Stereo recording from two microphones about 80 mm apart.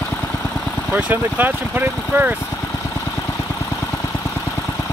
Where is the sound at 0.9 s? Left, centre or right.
Centre.